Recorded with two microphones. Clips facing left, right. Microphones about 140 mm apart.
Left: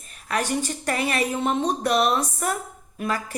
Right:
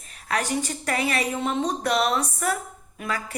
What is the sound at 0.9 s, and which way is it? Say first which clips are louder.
Speech: left 1 dB; 30° left (ahead or behind).